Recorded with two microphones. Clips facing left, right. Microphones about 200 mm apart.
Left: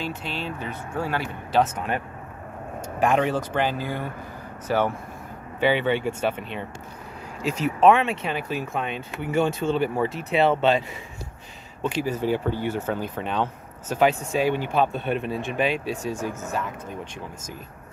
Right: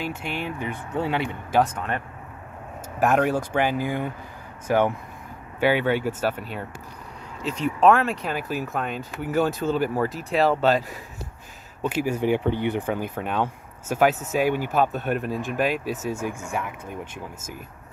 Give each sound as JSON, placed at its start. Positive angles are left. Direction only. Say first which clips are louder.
{"t": 0.0, "sound": "speech", "louder": "right 1 dB", "side_deg": -15}
{"t": 1.6, "sound": "speech", "louder": "even", "side_deg": 10}
{"t": 3.0, "sound": "speech", "louder": "right 1 dB", "side_deg": -5}